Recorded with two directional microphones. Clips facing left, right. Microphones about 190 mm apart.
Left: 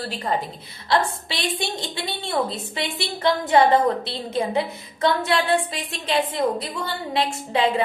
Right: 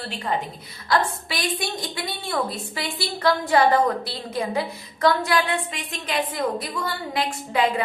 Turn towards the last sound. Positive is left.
turn(degrees=25)  # may be behind; listen again after turning